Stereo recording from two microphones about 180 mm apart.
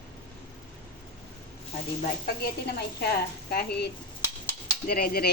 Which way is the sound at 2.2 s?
60° left (ahead or behind).